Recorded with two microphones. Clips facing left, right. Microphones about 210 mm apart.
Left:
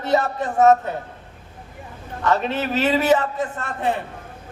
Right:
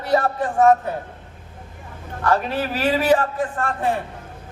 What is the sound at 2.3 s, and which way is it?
A man's voice, 20° left (ahead or behind).